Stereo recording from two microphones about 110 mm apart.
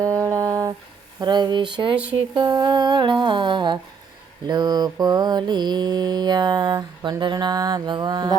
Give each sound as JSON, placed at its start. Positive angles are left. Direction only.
{"t": 0.3, "sound": "a sound", "side_deg": -30}
{"t": 1.2, "sound": "speech", "side_deg": -40}
{"t": 4.4, "sound": "mantra", "side_deg": -40}